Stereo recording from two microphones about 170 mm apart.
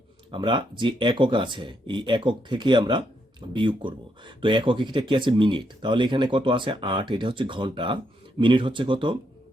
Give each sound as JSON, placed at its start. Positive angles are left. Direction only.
{"t": 0.3, "sound": "speech", "side_deg": -30}